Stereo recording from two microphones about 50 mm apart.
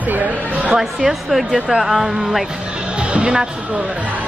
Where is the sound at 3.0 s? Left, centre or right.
Right.